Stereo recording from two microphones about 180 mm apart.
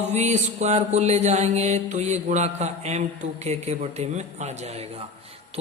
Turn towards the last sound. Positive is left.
turn(degrees=-40)  # may be behind; listen again after turning